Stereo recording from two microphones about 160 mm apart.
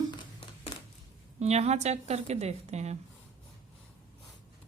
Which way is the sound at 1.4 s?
40° right (ahead or behind).